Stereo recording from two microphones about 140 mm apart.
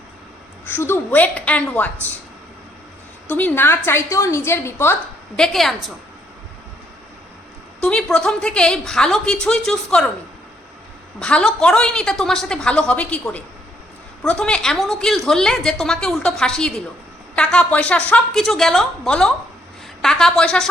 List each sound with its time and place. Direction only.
0.6 s a woman's voice: 15° left (ahead or behind)
3.2 s a woman's voice: 10° left (ahead or behind)
5.4 s a woman's voice: centre (ahead or behind)
7.8 s a woman's voice: 5° left (ahead or behind)
11.2 s a woman's voice: 5° left (ahead or behind)